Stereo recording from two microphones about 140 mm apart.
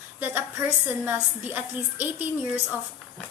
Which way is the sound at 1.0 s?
15° right (ahead or behind).